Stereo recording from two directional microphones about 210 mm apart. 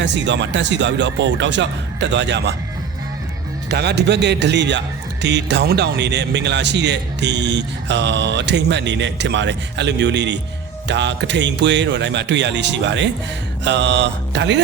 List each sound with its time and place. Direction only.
0.0 s a man's voice: 60° right (ahead or behind)
3.7 s a man's voice: 50° right (ahead or behind)